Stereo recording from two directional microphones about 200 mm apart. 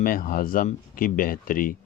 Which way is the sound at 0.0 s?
45° left (ahead or behind).